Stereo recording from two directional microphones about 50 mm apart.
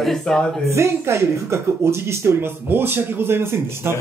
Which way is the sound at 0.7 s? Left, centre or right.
Right.